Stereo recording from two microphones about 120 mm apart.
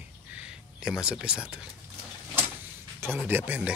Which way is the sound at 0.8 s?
5° right (ahead or behind).